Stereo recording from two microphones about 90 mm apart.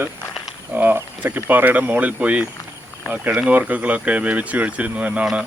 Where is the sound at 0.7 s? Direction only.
20° right (ahead or behind).